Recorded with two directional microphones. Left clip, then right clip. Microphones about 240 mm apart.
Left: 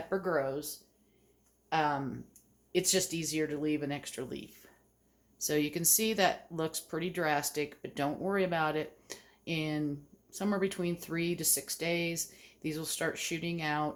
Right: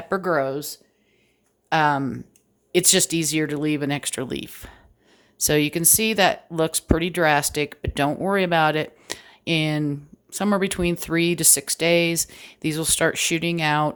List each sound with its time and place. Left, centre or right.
0.1 s speech: right
1.7 s speech: right